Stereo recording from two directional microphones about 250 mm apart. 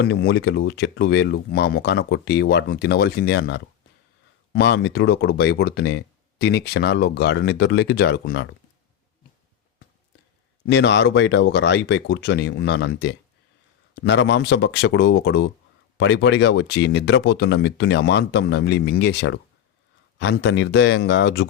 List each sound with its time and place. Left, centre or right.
0.0 s speech: left
10.7 s speech: left